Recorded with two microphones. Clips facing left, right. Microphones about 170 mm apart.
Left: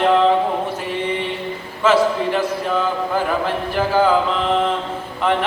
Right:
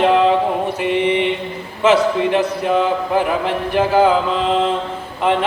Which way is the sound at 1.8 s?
20° right (ahead or behind).